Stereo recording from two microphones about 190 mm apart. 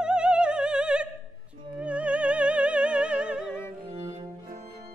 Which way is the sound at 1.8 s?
5° right (ahead or behind).